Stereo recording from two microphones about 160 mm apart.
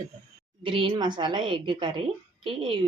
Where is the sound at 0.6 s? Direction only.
35° right (ahead or behind).